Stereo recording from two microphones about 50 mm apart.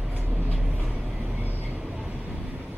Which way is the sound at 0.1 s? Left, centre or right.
Right.